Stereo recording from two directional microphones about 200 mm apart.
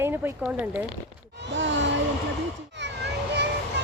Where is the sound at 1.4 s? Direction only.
65° right (ahead or behind).